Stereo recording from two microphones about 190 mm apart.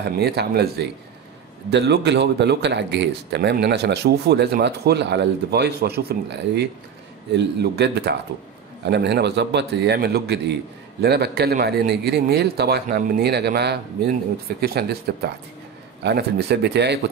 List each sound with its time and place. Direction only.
0.2 s speech: 60° right (ahead or behind)